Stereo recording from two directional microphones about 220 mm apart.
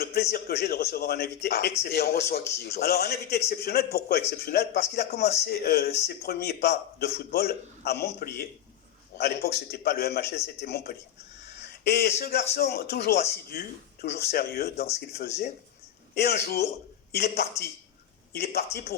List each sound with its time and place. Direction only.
0.0 s speech: 45° left (ahead or behind)
16.1 s speech: 50° left (ahead or behind)